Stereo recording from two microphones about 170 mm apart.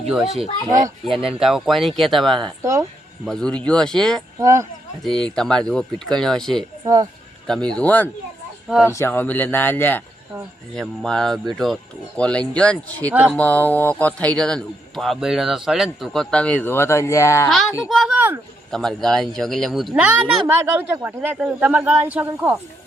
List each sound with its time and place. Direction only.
0.1 s speech: 5° right (ahead or behind)
2.6 s speech: 15° right (ahead or behind)
3.2 s speech: 5° left (ahead or behind)
4.4 s speech: 20° right (ahead or behind)
5.0 s speech: 5° left (ahead or behind)
6.8 s speech: 20° right (ahead or behind)
7.4 s a man's voice: 5° left (ahead or behind)
13.1 s speech: 10° right (ahead or behind)
13.3 s speech: 10° left (ahead or behind)
17.8 s speech: centre (ahead or behind)
19.9 s speech: 10° right (ahead or behind)